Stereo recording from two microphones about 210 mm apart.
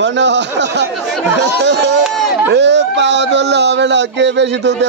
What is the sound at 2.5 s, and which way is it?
Speech, 55° right (ahead or behind).